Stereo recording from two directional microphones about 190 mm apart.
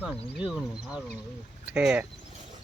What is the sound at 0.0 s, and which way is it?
Speech, 5° right (ahead or behind).